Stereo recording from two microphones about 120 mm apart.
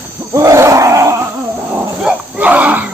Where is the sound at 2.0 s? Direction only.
10° right (ahead or behind).